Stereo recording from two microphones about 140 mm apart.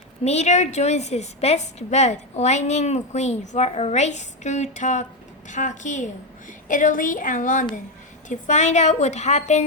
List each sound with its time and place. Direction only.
0.3 s a woman's voice: 50° left (ahead or behind)